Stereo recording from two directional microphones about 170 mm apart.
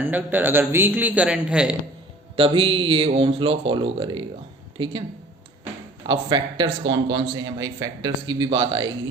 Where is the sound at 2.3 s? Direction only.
30° right (ahead or behind).